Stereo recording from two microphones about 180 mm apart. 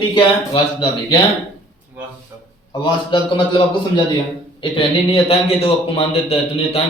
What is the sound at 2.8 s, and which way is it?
A man's voice, 30° left (ahead or behind).